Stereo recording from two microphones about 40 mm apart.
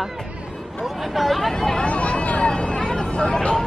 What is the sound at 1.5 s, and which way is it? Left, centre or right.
Speech, centre.